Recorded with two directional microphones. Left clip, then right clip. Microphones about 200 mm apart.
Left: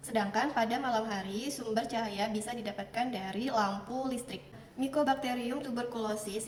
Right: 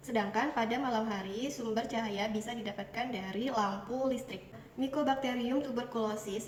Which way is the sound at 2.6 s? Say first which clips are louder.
Left 3 dB; 20° left (ahead or behind).